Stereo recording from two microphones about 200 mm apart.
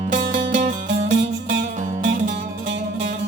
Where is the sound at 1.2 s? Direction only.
65° right (ahead or behind).